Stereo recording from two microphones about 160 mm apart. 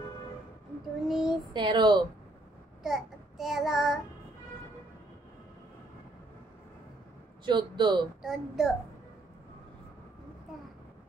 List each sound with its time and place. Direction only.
1.0 s child singing: 5° right (ahead or behind)
1.5 s a man's voice: 30° right (ahead or behind)
2.8 s child singing: centre (ahead or behind)
7.4 s a man's voice: 30° right (ahead or behind)
8.2 s a child's voice: centre (ahead or behind)